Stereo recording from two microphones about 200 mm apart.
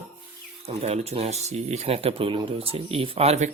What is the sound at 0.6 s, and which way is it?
Speech, 30° right (ahead or behind).